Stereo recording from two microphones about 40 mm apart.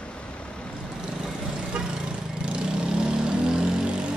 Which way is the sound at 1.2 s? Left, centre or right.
Centre.